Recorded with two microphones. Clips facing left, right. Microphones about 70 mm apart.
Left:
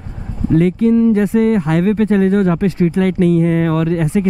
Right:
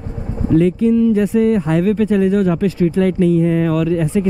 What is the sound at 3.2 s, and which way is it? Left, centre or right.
Speech, left.